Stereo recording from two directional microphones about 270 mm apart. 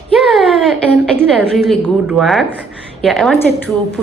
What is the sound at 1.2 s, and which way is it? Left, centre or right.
A woman's voice, centre.